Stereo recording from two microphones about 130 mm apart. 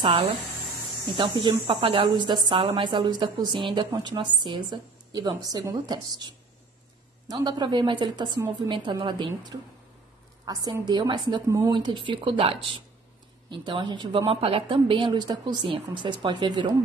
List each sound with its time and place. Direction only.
0.0 s a woman's voice: 45° right (ahead or behind)
11.4 s a woman's voice: 25° right (ahead or behind)
11.7 s a woman's voice: 40° right (ahead or behind)
14.2 s a woman's voice: 45° right (ahead or behind)